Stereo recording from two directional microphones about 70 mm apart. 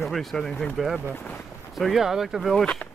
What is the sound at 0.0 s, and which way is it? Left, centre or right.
Speech, centre.